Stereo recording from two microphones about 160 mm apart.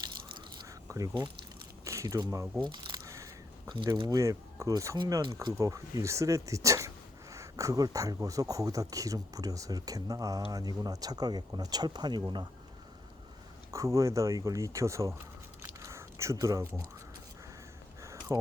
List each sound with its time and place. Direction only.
0.9 s squish: 20° right (ahead or behind)
1.8 s speech: 20° right (ahead or behind)
2.7 s a sound: 25° right (ahead or behind)
3.9 s speech: 25° right (ahead or behind)
13.7 s speech: 20° right (ahead or behind)
15.6 s camera: 15° right (ahead or behind)
18.0 s a sound: 20° right (ahead or behind)